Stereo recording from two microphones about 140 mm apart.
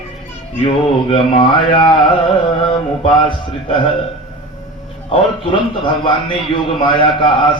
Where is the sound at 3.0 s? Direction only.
40° left (ahead or behind).